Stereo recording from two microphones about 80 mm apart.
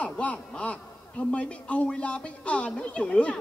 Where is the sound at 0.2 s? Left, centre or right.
Centre.